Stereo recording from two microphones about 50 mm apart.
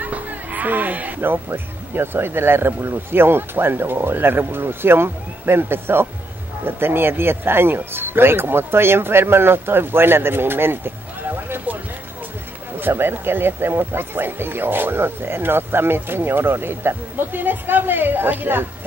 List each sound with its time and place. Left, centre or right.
0.0 s speech: right
11.3 s a sound: right
12.7 s speech: right